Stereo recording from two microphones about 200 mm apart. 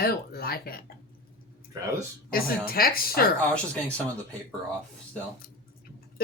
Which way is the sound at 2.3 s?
45° left (ahead or behind).